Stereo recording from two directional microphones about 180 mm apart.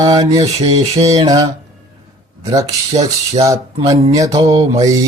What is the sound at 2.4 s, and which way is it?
Speech, 20° right (ahead or behind).